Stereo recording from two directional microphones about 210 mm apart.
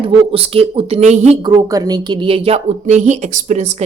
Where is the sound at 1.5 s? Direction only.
15° right (ahead or behind).